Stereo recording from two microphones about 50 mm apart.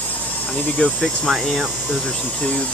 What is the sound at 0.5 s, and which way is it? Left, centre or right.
Speech, left.